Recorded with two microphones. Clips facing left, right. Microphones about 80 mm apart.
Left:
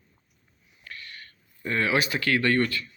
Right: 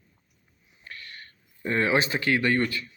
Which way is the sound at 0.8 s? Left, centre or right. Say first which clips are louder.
Even; right.